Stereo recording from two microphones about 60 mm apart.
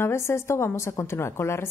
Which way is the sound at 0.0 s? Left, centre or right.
Left.